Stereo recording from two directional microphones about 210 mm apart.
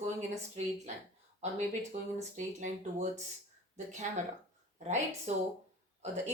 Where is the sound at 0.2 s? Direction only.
30° right (ahead or behind).